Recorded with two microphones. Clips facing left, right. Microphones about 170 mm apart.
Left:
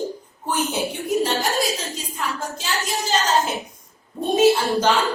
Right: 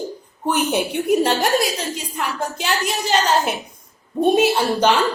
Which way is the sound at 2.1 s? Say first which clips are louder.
Right 2 dB; 65° right (ahead or behind).